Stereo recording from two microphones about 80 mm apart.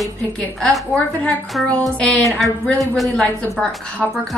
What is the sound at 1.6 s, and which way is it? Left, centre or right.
Speech, centre.